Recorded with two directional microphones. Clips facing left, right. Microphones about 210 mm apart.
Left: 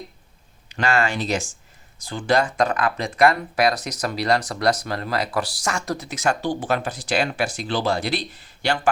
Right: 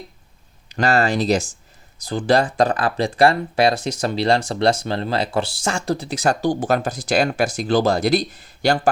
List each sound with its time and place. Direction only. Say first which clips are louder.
0.7 s speech: right 4 dB; 40° right (ahead or behind)